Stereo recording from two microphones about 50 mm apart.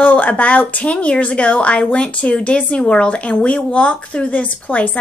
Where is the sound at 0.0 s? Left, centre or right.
Left.